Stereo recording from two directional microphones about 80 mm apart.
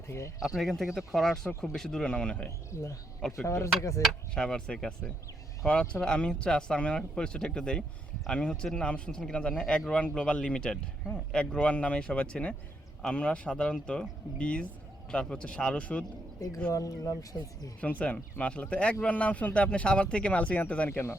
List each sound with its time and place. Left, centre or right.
0.3 s speech: centre
3.4 s speech: left
4.4 s speech: centre
16.4 s speech: left
17.7 s speech: centre